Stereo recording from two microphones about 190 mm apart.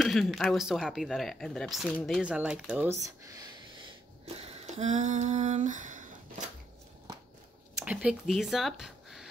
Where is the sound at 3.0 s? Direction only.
20° right (ahead or behind).